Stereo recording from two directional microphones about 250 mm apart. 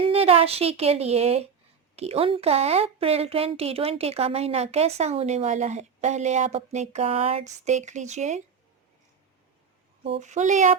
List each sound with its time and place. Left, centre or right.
0.0 s a woman's voice: right
10.0 s a woman's voice: right